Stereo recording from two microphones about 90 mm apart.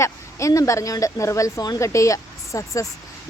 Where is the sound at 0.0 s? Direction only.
35° left (ahead or behind).